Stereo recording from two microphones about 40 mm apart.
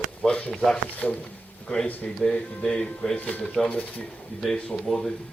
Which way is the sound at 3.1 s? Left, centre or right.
Left.